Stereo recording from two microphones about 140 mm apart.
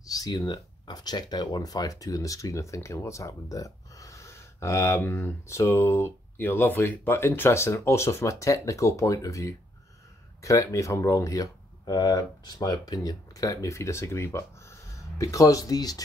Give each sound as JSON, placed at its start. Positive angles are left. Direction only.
{"t": 0.0, "sound": "speech", "side_deg": 25}